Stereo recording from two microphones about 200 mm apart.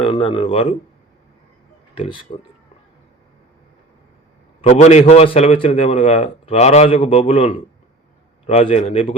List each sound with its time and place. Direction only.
0.0 s speech: 25° left (ahead or behind)
2.0 s speech: 25° left (ahead or behind)
4.6 s a man's voice: 35° left (ahead or behind)